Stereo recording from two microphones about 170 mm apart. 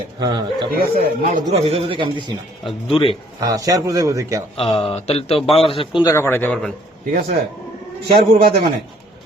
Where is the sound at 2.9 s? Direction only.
35° left (ahead or behind).